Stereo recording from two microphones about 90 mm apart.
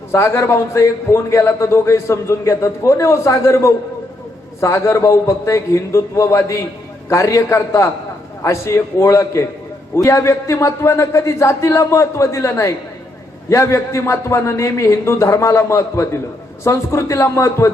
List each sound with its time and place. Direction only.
0.1 s a man's voice: 30° left (ahead or behind)